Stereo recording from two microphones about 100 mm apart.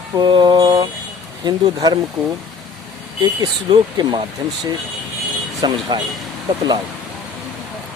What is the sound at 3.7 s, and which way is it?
Speech, 55° right (ahead or behind).